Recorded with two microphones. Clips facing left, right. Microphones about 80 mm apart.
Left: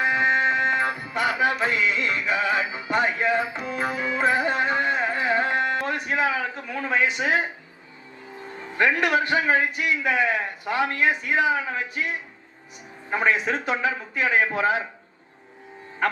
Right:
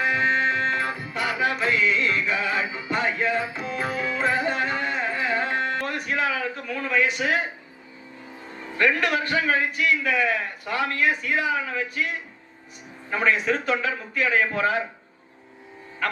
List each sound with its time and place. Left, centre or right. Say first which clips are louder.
0.0 s music: left 1 dB; left
5.7 s a sound: left 2 dB; left
8.8 s a man's voice: left 1 dB; left